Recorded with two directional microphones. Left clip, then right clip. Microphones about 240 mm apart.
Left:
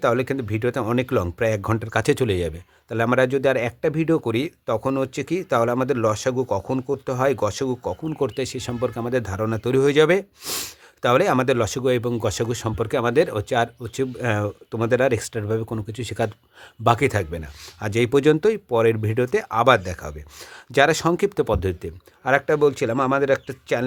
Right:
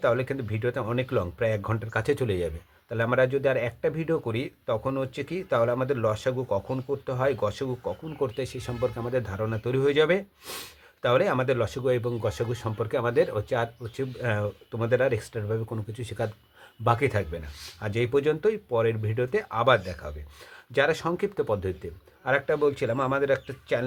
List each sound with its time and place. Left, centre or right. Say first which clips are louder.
0.0 s speech: left 4 dB; left